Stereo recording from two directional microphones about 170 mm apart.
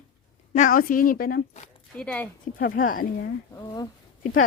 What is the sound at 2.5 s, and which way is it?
Speech, 60° left (ahead or behind).